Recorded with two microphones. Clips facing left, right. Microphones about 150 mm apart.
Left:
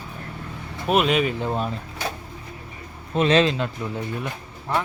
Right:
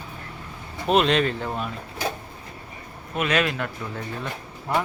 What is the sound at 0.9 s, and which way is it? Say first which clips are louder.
Speech: even; 5° left (ahead or behind).